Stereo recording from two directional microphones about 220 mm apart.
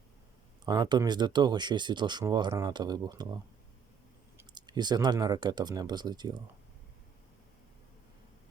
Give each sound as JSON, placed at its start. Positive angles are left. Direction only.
{"t": 0.6, "sound": "speech", "side_deg": -20}
{"t": 4.4, "sound": "speech", "side_deg": -20}